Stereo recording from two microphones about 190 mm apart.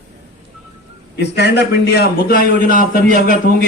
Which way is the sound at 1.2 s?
60° left (ahead or behind).